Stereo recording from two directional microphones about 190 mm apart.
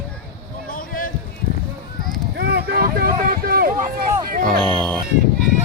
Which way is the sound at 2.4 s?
55° right (ahead or behind).